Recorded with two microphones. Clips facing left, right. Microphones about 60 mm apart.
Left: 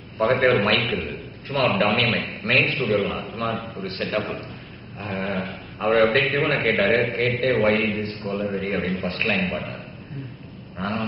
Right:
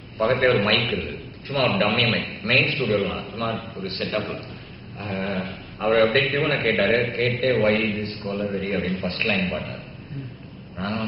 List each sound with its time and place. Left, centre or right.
0.2 s a man's voice: centre
10.8 s a man's voice: centre